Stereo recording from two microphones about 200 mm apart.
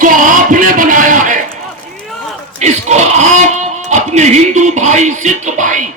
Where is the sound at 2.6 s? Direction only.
35° right (ahead or behind).